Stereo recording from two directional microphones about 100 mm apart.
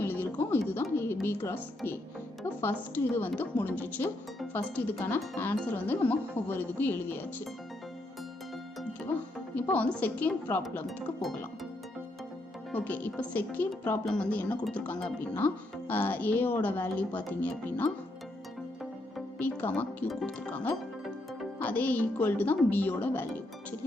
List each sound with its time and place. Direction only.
0.0 s music: 20° left (ahead or behind)
2.6 s a woman's voice: 25° left (ahead or behind)
9.6 s speech: 15° left (ahead or behind)
10.8 s speech: centre (ahead or behind)
12.7 s speech: 15° left (ahead or behind)
19.4 s speech: 15° left (ahead or behind)